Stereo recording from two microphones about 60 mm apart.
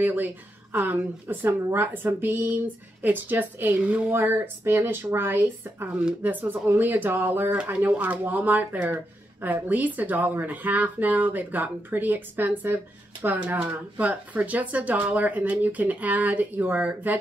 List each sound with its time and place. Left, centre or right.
0.0 s speech: right